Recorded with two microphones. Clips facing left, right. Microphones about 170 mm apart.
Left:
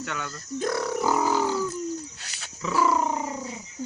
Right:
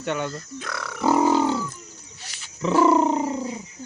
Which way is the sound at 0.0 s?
25° right (ahead or behind).